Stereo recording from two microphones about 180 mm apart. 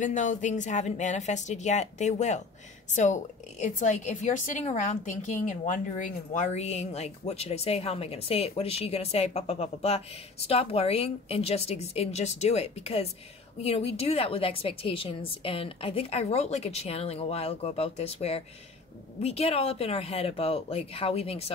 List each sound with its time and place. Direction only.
0.0 s a woman's voice: 45° left (ahead or behind)